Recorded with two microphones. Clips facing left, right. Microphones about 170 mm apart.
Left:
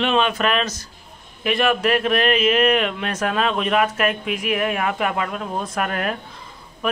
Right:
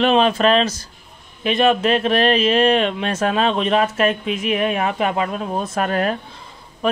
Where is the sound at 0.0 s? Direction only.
35° right (ahead or behind).